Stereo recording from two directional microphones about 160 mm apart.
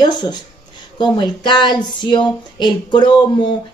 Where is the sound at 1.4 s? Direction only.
25° left (ahead or behind).